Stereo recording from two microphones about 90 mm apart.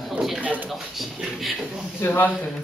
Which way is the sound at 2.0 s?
25° left (ahead or behind).